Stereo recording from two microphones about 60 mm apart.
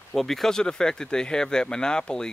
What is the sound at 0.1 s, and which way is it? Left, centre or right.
Speech, centre.